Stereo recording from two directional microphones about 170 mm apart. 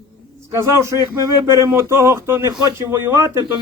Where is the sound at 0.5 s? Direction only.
15° right (ahead or behind).